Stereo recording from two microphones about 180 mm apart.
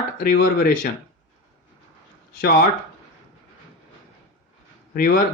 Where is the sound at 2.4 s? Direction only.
60° left (ahead or behind).